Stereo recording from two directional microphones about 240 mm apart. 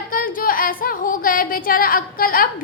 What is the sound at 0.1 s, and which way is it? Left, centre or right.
Music, left.